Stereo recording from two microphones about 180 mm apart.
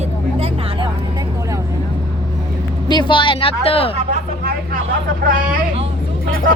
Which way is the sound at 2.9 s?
25° left (ahead or behind).